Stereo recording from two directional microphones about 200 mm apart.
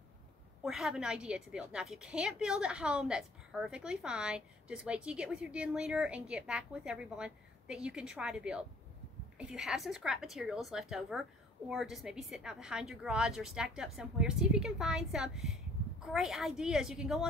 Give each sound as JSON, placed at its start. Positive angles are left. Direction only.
{"t": 0.7, "sound": "a woman's voice", "side_deg": 0}